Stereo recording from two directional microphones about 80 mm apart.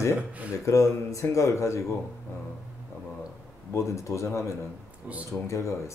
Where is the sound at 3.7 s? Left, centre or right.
Left.